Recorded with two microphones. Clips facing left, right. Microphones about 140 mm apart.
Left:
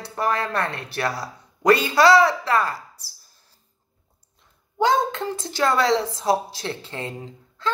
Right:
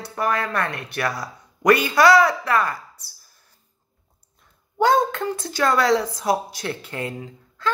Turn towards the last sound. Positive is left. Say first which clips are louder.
# right 1 dB
turn(degrees=25)  # may be behind; listen again after turning